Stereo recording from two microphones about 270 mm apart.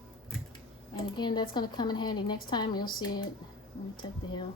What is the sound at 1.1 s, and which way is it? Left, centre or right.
A woman's voice, centre.